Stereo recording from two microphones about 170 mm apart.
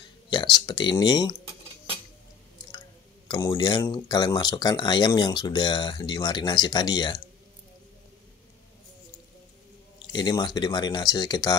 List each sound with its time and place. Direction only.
0.6 s speech: 25° left (ahead or behind)
3.3 s speech: 20° left (ahead or behind)
9.9 s speech: 25° left (ahead or behind)